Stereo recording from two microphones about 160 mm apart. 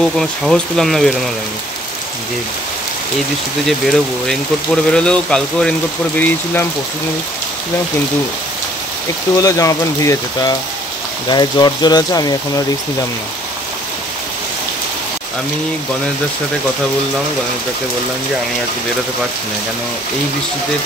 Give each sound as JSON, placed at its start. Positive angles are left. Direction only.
{"t": 0.0, "sound": "speech", "side_deg": 0}
{"t": 3.6, "sound": "speech", "side_deg": 0}
{"t": 9.4, "sound": "speech", "side_deg": 20}